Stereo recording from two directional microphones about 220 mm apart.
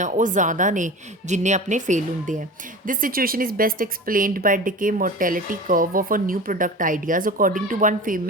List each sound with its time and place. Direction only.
0.0 s a woman's voice: 35° right (ahead or behind)